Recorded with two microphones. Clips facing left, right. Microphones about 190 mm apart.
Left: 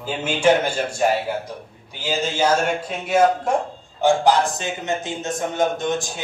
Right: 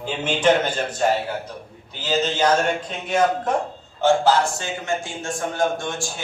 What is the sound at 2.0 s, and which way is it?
A man's voice, 10° left (ahead or behind).